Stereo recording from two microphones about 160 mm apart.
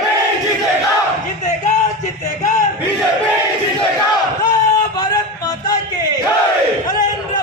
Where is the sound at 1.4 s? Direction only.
50° left (ahead or behind).